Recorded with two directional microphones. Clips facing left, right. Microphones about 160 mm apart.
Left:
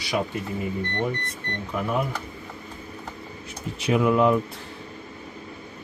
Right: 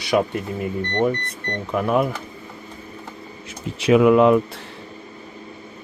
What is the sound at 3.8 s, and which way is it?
Speech, 90° right.